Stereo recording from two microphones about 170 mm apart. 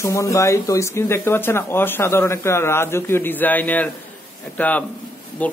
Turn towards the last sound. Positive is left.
turn(degrees=10)  # may be behind; listen again after turning